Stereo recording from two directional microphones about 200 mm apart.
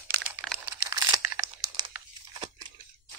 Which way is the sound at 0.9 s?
15° right (ahead or behind).